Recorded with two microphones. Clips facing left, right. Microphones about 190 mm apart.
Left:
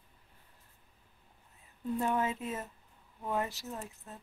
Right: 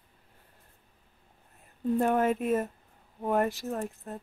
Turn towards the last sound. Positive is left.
turn(degrees=-55)  # may be behind; listen again after turning